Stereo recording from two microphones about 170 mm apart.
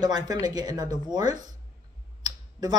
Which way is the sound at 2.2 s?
20° right (ahead or behind).